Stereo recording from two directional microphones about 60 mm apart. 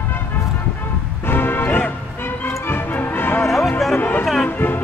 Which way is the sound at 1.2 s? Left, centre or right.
Left.